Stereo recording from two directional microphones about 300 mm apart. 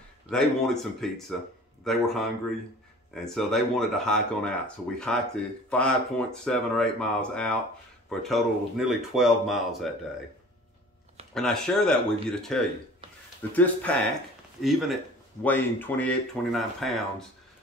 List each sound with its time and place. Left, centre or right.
0.3 s speech: centre
3.3 s speech: centre
11.3 s speech: centre